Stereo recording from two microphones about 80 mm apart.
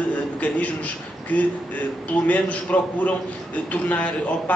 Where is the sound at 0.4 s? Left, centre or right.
Centre.